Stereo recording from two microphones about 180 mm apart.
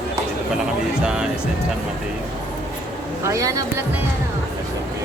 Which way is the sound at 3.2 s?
20° right (ahead or behind).